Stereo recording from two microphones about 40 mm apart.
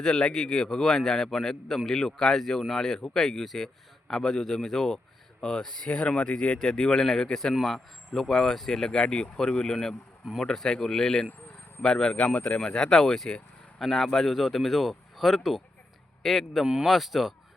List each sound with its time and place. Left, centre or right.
0.0 s speech: centre
5.9 s speech: left
6.6 s speech: centre
12.1 s speech: left
12.5 s speech: left; by 17.3 s centre